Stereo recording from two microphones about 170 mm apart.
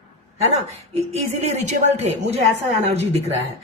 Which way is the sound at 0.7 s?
40° right (ahead or behind).